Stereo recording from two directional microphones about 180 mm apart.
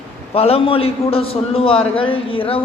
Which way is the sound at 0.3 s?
35° left (ahead or behind).